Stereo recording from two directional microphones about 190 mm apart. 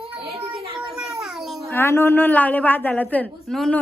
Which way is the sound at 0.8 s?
5° right (ahead or behind).